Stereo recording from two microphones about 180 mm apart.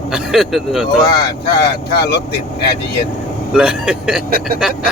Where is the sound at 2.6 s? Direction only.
60° left (ahead or behind).